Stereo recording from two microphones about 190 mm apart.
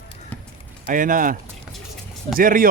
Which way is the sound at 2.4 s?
45° right (ahead or behind).